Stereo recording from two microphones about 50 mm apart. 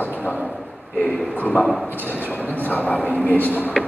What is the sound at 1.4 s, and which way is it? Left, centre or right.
A man's voice, left.